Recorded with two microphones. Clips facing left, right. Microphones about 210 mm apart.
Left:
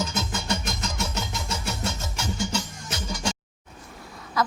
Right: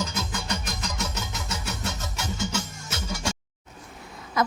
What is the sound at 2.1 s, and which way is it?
Music, 20° right (ahead or behind).